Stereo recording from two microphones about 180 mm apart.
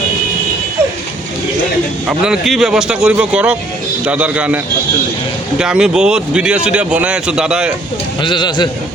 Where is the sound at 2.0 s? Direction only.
5° right (ahead or behind).